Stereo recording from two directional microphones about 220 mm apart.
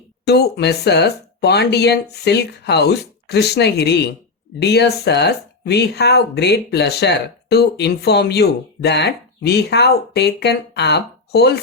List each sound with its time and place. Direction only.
0.3 s speech: 45° left (ahead or behind)